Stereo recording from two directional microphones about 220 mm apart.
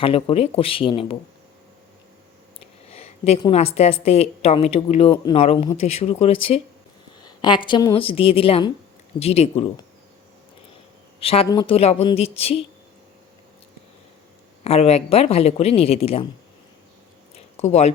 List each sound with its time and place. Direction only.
0.0 s a woman's voice: 25° left (ahead or behind)
2.9 s a woman's voice: 25° left (ahead or behind)
7.2 s a sound: 20° left (ahead or behind)
7.7 s a woman's voice: 20° left (ahead or behind)
11.2 s a woman's voice: 25° left (ahead or behind)
14.6 s a woman's voice: 30° left (ahead or behind)
17.3 s a sound: 30° left (ahead or behind)